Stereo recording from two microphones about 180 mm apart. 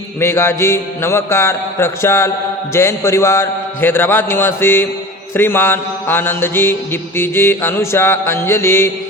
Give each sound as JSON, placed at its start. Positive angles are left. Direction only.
{"t": 0.2, "sound": "mantra", "side_deg": 15}